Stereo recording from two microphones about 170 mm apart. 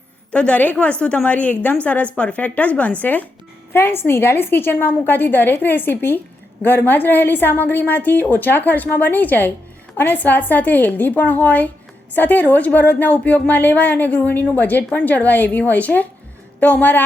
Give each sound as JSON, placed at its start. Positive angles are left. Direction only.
{"t": 0.3, "sound": "a woman's voice", "side_deg": 5}